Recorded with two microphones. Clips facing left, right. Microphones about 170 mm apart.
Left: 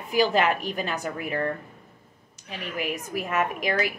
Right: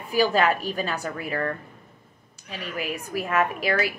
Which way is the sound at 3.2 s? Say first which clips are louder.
Right 2 dB; 15° left (ahead or behind).